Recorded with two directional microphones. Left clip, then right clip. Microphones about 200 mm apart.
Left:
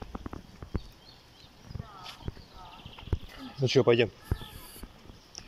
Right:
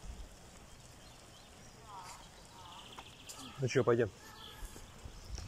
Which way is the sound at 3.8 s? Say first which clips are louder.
Left 6 dB; 15° left (ahead or behind).